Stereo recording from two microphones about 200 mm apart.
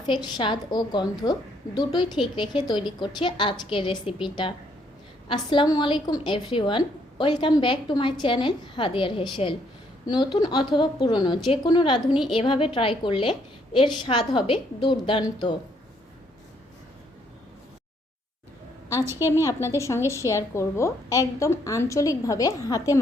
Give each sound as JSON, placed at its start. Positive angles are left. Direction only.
{"t": 0.1, "sound": "a woman's voice", "side_deg": 20}
{"t": 19.2, "sound": "a woman's voice", "side_deg": 15}